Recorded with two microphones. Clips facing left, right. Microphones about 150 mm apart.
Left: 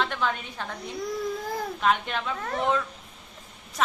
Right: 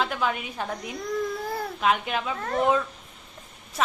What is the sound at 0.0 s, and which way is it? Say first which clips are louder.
A woman's voice: right 1 dB; 5° right (ahead or behind).